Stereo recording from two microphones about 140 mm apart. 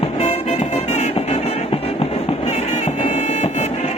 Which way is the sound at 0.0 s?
45° left (ahead or behind).